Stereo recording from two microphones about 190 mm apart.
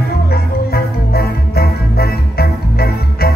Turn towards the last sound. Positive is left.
turn(degrees=55)  # may be behind; listen again after turning